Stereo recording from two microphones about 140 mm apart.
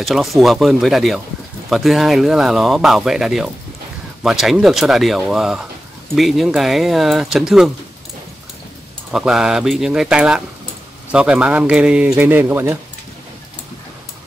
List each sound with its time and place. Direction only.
0.0 s speech: centre (ahead or behind)
9.1 s a man's voice: 5° right (ahead or behind)